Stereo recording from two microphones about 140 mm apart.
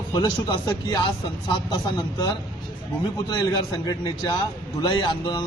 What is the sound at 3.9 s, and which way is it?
Speech, 30° left (ahead or behind).